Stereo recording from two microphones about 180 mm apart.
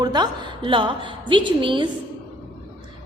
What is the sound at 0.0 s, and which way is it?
A woman's voice, 25° right (ahead or behind).